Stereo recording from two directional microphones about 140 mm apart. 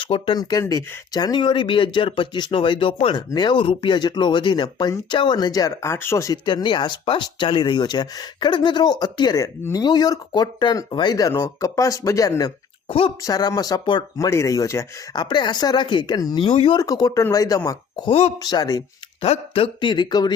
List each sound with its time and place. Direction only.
0.0 s speech: 40° left (ahead or behind)
0.6 s speech: 20° left (ahead or behind)
12.9 s speech: 40° left (ahead or behind)
13.2 s speech: 25° left (ahead or behind)
15.2 s speech: 35° left (ahead or behind)
16.5 s speech: 45° left (ahead or behind)
16.8 s speech: 25° left (ahead or behind)
19.2 s speech: 45° left (ahead or behind)